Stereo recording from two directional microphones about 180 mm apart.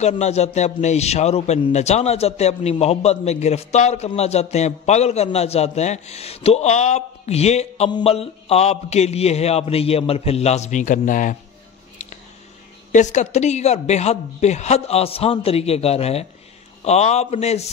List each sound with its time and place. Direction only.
0.0 s a man's voice: 40° left (ahead or behind)
12.9 s a man's voice: 40° left (ahead or behind)